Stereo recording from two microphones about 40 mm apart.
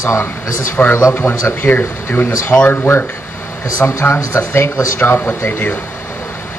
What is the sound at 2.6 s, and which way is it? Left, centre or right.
Speech, left.